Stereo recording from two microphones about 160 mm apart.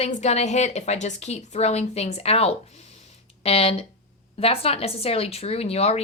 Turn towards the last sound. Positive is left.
turn(degrees=40)  # may be behind; listen again after turning